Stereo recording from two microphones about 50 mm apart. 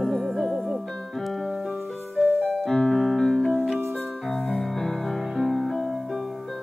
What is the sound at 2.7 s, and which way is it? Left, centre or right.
Piano, centre.